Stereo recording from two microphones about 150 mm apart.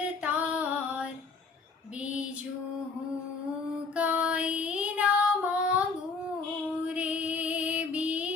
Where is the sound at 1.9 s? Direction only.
10° right (ahead or behind).